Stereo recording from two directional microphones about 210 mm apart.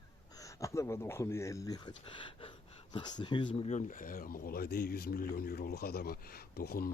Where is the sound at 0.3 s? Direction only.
15° left (ahead or behind).